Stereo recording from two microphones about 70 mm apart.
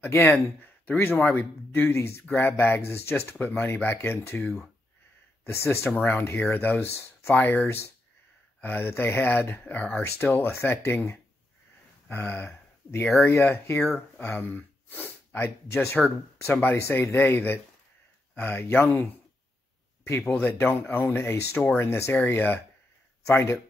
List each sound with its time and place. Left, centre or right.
0.0 s speech: left
7.6 s speech: left
8.5 s speech: left
12.2 s speech: left
13.1 s speech: left
13.4 s speech: left
20.3 s speech: left